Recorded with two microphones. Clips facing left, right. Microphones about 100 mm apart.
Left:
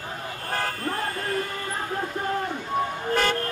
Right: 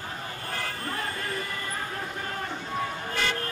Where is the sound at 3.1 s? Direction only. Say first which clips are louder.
Left 8 dB; 45° left (ahead or behind).